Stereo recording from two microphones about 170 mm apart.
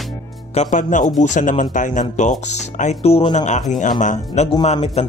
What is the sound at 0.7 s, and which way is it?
A man's voice, 50° left (ahead or behind).